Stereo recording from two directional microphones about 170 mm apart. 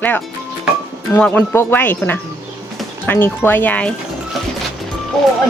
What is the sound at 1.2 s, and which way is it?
Speech, 10° left (ahead or behind).